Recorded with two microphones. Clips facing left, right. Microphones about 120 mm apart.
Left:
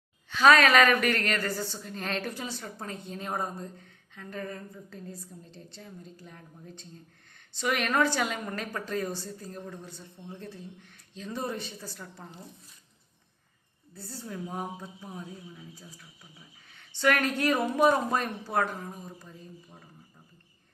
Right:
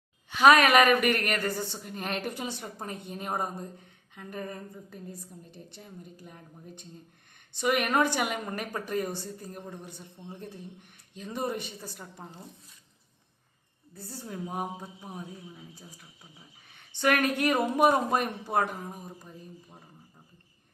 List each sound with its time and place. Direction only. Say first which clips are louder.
0.3 s a woman's voice: right 1 dB; 15° right (ahead or behind)
13.9 s a woman's voice: even; 15° right (ahead or behind)